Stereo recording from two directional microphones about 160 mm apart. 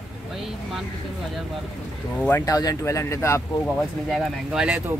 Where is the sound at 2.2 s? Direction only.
20° left (ahead or behind).